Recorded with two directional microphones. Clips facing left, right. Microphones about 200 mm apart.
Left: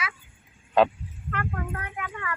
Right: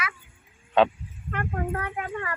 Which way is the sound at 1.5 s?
35° right (ahead or behind).